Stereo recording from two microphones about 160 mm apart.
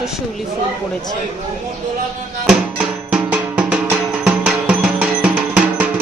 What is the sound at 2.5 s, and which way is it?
Music, 10° right (ahead or behind).